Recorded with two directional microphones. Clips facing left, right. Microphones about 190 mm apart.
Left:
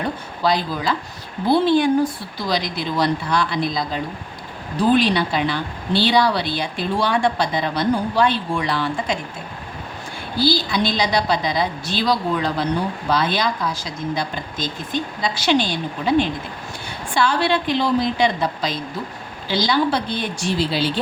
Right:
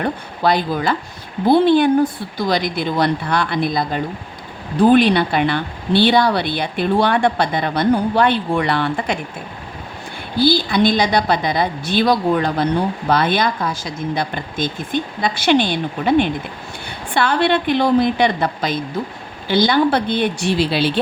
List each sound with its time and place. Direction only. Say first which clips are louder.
0.0 s speech: right 3 dB; 55° right (ahead or behind)
10.4 s speech: right 5 dB; 55° right (ahead or behind)